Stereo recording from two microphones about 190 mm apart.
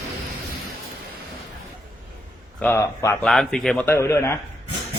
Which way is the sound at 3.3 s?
Centre (ahead or behind).